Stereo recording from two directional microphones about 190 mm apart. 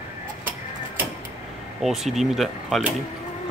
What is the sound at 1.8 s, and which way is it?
Speech, centre (ahead or behind).